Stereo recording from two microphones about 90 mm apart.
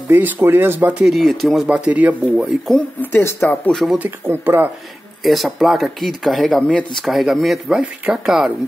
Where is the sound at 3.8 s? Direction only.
20° right (ahead or behind).